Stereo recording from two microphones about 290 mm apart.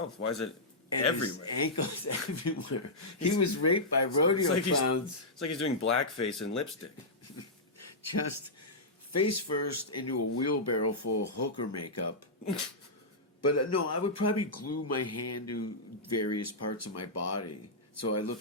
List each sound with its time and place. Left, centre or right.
0.2 s speech: left
9.1 s speech: left
13.4 s speech: left